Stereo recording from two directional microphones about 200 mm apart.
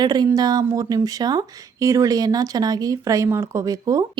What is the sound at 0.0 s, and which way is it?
Speech, 20° right (ahead or behind).